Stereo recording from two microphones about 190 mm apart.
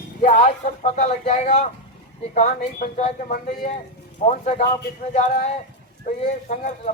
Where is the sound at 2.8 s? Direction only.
40° left (ahead or behind).